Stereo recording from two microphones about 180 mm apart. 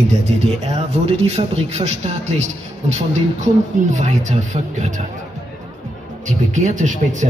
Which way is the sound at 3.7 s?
45° right (ahead or behind).